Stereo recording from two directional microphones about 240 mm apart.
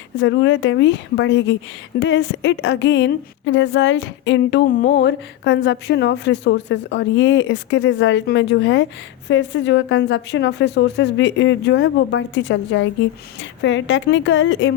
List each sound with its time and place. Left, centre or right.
0.2 s a woman's voice: left